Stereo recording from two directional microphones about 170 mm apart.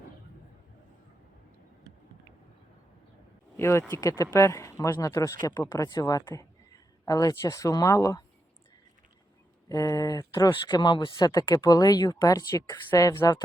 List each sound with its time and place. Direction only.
3.6 s speech: 15° left (ahead or behind)
9.6 s speech: 20° left (ahead or behind)